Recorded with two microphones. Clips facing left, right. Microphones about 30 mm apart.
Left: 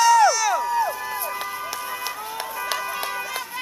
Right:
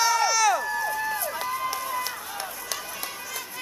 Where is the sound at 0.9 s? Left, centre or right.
Centre.